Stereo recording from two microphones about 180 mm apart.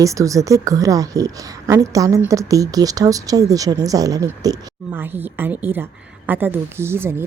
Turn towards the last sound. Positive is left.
turn(degrees=-15)  # may be behind; listen again after turning